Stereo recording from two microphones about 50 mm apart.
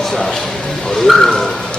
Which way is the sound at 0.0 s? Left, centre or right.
Centre.